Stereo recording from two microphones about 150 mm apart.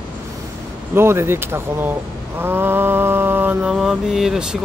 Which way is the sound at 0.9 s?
15° right (ahead or behind).